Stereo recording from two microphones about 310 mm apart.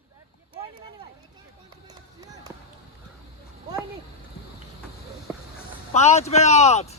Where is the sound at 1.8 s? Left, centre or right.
Centre.